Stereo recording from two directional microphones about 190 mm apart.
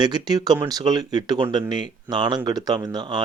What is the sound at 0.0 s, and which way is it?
Speech, 20° right (ahead or behind).